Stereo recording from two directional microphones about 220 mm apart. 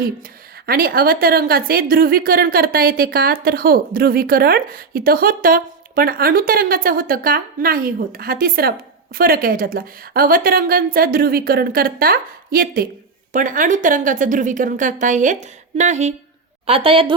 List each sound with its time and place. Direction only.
0.7 s a woman's voice: 40° right (ahead or behind); by 17.2 s 25° right (ahead or behind)